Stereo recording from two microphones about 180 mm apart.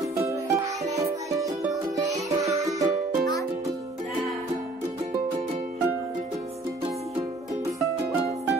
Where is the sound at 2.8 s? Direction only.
45° right (ahead or behind).